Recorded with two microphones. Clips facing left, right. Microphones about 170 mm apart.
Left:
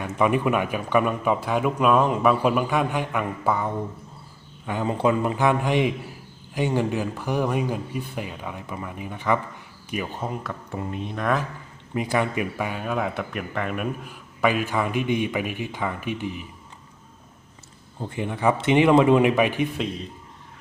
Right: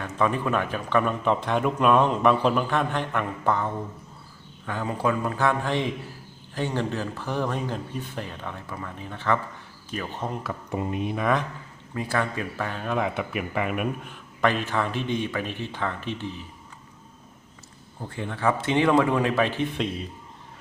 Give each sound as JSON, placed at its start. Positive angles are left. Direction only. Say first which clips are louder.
{"t": 0.0, "sound": "speech", "louder": "left 3 dB", "side_deg": 15}
{"t": 10.7, "sound": "speech", "louder": "right 4 dB", "side_deg": -15}
{"t": 11.9, "sound": "speech", "louder": "left 3 dB", "side_deg": 15}
{"t": 14.1, "sound": "speech", "louder": "left 3 dB", "side_deg": 10}
{"t": 18.0, "sound": "speech", "louder": "left 3 dB", "side_deg": 15}